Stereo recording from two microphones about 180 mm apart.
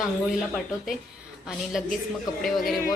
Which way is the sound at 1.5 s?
Centre (ahead or behind).